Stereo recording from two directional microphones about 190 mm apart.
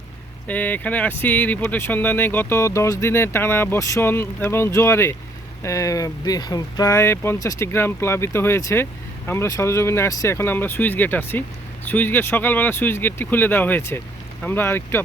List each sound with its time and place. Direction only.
0.4 s speech: 10° left (ahead or behind)